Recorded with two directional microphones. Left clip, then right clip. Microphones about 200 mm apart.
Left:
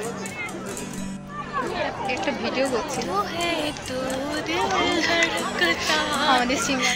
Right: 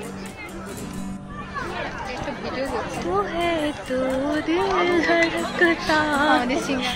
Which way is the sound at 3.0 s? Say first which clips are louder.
Right 2 dB; 15° right (ahead or behind).